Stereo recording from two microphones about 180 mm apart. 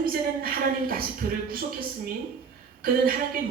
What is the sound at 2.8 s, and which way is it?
Music, 55° right (ahead or behind).